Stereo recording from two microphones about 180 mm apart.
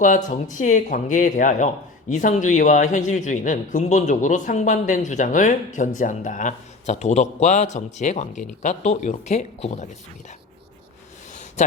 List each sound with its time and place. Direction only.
0.3 s speech: 45° left (ahead or behind)